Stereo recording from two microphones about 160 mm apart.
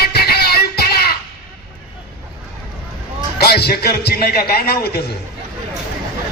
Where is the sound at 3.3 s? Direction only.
80° left.